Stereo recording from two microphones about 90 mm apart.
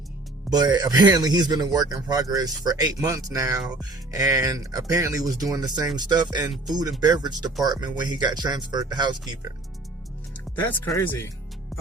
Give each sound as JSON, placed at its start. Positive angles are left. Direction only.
{"t": 0.5, "sound": "speech", "side_deg": -50}
{"t": 10.5, "sound": "speech", "side_deg": 20}